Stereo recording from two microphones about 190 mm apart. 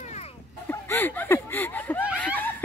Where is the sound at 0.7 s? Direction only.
10° left (ahead or behind).